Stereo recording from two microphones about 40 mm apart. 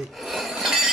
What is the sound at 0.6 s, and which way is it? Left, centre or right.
Train, centre.